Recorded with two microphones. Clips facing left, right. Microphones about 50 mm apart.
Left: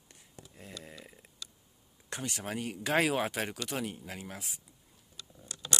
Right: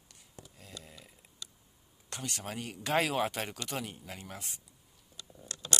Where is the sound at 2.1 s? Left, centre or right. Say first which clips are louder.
Left 3 dB; centre.